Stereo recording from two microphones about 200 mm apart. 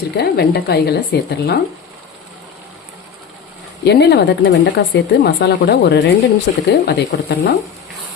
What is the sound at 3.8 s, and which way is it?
Speech, 55° left (ahead or behind).